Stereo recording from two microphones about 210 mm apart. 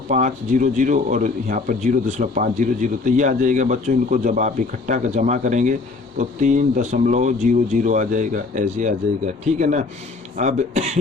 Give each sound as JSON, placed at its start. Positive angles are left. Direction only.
{"t": 0.1, "sound": "speech", "side_deg": -35}